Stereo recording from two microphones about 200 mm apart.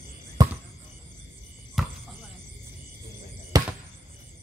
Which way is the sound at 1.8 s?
Centre (ahead or behind).